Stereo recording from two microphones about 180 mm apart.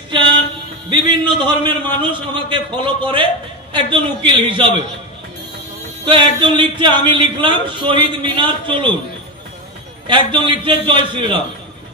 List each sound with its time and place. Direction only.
0.8 s speech: 25° right (ahead or behind)
6.0 s speech: 30° right (ahead or behind)
10.0 s speech: 30° right (ahead or behind)